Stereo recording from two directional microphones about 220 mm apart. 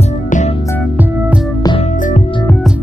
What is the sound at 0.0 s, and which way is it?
Music, 30° left (ahead or behind).